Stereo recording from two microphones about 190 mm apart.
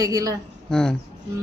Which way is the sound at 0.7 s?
5° left (ahead or behind).